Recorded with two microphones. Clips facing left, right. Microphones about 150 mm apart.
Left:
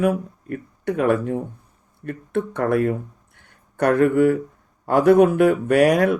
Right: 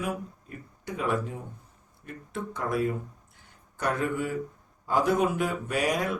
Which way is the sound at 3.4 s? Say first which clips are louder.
Left 14 dB; 60° left (ahead or behind).